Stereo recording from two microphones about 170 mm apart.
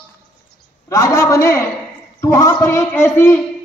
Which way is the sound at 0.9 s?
20° left (ahead or behind).